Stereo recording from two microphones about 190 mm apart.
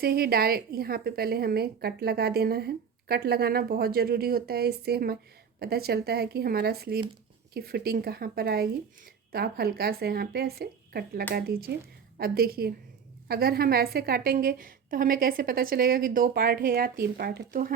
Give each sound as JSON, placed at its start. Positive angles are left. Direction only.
{"t": 0.0, "sound": "a woman's voice", "side_deg": -55}